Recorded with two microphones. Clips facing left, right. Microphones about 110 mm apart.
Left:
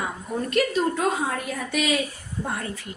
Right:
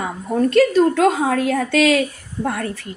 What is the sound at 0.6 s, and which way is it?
A woman's voice, 80° right.